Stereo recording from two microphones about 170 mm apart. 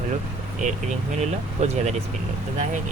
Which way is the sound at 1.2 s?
40° right (ahead or behind).